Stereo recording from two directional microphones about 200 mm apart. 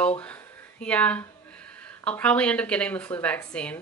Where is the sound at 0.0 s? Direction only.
5° left (ahead or behind).